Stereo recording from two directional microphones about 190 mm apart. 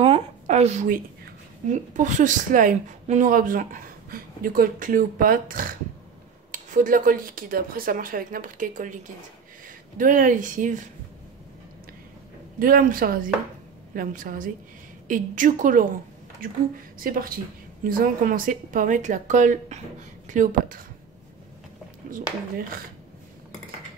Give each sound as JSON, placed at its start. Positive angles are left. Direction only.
{"t": 0.0, "sound": "a woman's voice", "side_deg": -35}
{"t": 12.5, "sound": "speech", "side_deg": -45}